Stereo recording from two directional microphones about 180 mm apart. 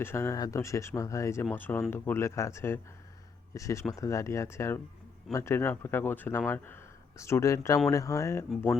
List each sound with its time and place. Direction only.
0.0 s speech: 15° left (ahead or behind)